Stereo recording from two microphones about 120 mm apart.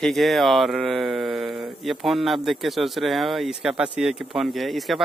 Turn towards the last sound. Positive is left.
turn(degrees=0)  # may be behind; listen again after turning